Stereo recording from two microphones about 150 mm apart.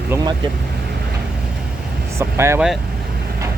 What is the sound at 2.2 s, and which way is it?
Vehicle, 20° right (ahead or behind).